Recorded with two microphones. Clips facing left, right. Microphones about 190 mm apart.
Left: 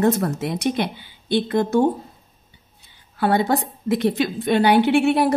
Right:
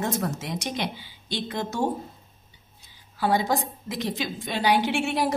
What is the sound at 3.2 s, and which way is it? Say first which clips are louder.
A woman's voice: left 5 dB; 60° left (ahead or behind).